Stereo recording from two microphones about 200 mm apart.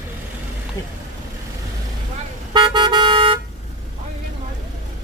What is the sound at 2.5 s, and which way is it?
Toot, 20° right (ahead or behind).